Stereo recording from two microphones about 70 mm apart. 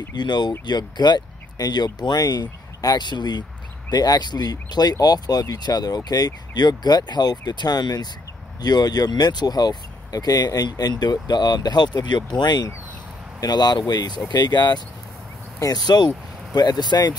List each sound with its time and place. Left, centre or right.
0.1 s speech: left
13.4 s speech: left
15.6 s speech: left